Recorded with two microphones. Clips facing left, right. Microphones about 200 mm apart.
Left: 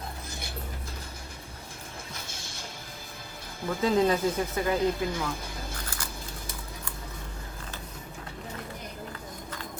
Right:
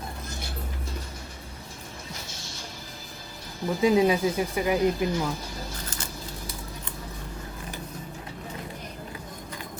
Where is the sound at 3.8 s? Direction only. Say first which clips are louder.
Right 3 dB; 10° right (ahead or behind).